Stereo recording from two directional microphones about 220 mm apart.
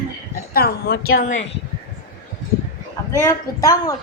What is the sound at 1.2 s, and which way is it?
Speech, 35° left (ahead or behind).